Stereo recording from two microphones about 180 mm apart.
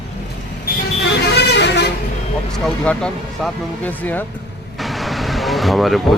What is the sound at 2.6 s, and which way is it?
Speech, 5° left (ahead or behind).